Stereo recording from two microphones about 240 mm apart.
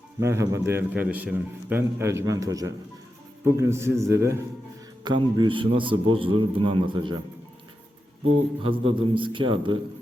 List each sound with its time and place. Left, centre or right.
0.2 s a man's voice: centre
8.6 s a man's voice: right